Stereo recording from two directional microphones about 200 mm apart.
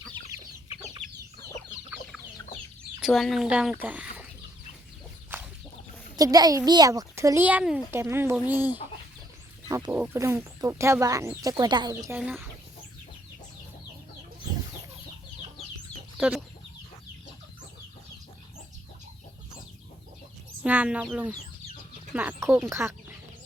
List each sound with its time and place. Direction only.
1.0 s chicken: 5° left (ahead or behind)
3.0 s speech: centre (ahead or behind)
6.1 s a child's voice: 20° right (ahead or behind)
16.1 s chicken: 5° right (ahead or behind)
20.7 s speech: 5° right (ahead or behind)